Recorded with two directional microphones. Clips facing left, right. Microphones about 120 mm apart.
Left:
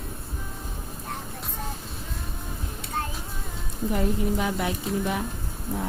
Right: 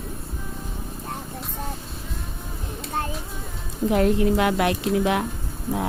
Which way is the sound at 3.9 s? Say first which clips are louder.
Right 7 dB; 85° right.